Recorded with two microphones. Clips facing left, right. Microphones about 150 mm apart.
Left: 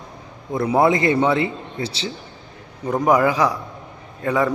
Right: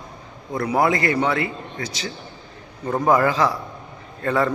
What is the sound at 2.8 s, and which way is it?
Speech, 15° left (ahead or behind).